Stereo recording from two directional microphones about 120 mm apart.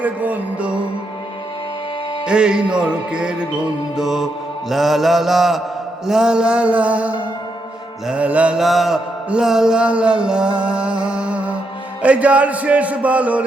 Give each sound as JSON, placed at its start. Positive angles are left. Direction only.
{"t": 0.0, "sound": "mantra", "side_deg": -15}
{"t": 2.2, "sound": "mantra", "side_deg": -5}